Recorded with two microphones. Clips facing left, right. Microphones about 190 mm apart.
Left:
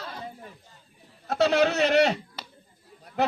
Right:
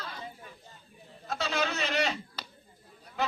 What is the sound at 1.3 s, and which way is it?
Speech, 65° left (ahead or behind).